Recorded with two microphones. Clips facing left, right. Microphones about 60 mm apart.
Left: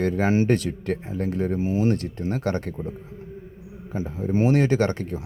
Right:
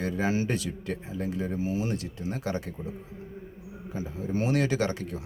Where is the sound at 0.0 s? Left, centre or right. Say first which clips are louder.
Left 7 dB; left.